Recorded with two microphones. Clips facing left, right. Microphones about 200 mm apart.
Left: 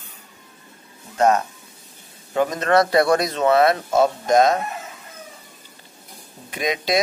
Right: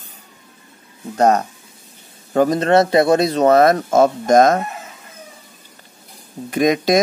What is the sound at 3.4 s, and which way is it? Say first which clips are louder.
Speech: right 5 dB; 40° right (ahead or behind).